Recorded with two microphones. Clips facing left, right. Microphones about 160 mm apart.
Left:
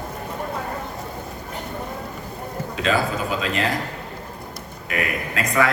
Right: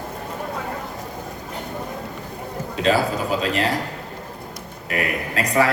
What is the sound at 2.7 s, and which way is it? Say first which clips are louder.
Speech: right 3 dB; 35° right (ahead or behind).